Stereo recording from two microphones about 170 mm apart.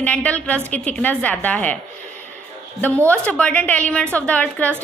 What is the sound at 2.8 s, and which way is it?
A woman's voice, 10° left (ahead or behind).